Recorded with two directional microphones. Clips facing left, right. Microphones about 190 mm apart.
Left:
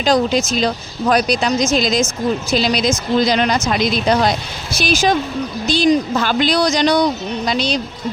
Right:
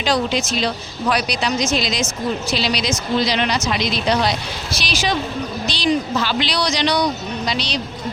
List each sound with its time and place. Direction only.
0.0 s speech: 45° left (ahead or behind)